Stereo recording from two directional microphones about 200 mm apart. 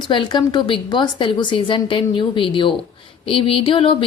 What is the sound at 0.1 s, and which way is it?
A woman's voice, 25° left (ahead or behind).